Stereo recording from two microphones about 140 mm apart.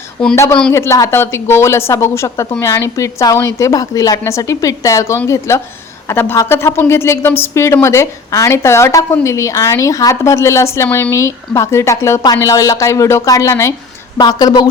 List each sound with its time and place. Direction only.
0.3 s a woman's voice: 20° left (ahead or behind)